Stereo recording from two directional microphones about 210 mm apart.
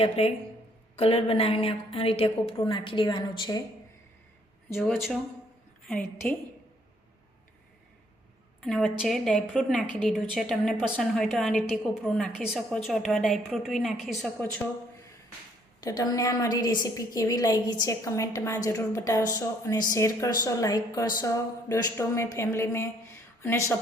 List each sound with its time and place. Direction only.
0.0 s a woman's voice: 30° left (ahead or behind)
4.7 s a woman's voice: centre (ahead or behind)
8.6 s a woman's voice: 5° left (ahead or behind)
15.8 s a woman's voice: 20° left (ahead or behind)